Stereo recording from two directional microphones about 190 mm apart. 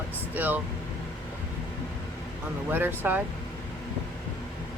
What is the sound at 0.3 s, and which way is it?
Speech, 10° right (ahead or behind).